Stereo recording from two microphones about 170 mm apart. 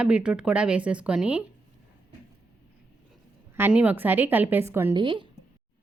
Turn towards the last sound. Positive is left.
turn(degrees=-30)  # may be behind; listen again after turning